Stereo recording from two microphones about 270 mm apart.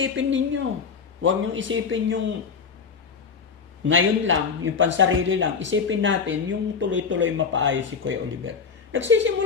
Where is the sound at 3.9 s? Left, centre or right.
Right.